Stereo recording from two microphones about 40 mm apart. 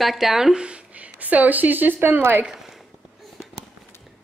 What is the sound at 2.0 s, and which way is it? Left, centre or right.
Speech, right.